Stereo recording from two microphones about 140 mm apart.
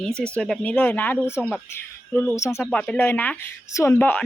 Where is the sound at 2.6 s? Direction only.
5° left (ahead or behind).